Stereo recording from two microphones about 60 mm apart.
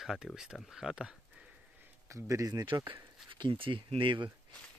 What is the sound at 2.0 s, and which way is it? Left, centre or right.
Speech, right.